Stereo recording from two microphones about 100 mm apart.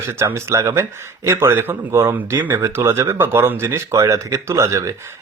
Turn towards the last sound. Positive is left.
turn(degrees=-30)  # may be behind; listen again after turning